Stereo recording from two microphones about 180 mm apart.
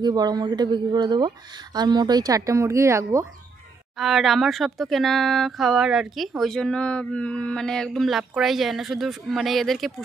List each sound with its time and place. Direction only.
0.0 s speech: 20° right (ahead or behind)
4.0 s speech: centre (ahead or behind)